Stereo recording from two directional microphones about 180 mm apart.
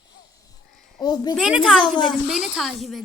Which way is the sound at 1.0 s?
25° left (ahead or behind).